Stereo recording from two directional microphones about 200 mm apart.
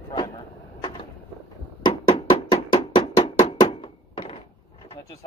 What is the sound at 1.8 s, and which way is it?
Music, 20° left (ahead or behind).